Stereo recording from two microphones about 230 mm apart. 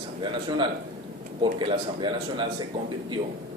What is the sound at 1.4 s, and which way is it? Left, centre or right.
A man's voice, right.